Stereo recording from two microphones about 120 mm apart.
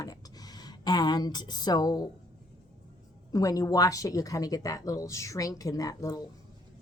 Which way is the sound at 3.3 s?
30° left (ahead or behind).